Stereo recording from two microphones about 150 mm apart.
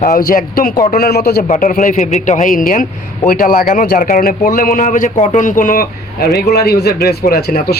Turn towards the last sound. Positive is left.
turn(degrees=90)